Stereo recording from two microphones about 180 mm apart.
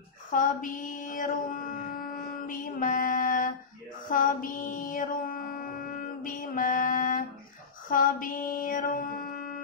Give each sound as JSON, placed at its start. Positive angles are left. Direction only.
{"t": 0.3, "sound": "a sound", "side_deg": 50}
{"t": 2.4, "sound": "music", "side_deg": 50}
{"t": 4.1, "sound": "mantra", "side_deg": 50}